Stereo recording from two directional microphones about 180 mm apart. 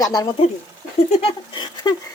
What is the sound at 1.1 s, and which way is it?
Patter, 30° left (ahead or behind).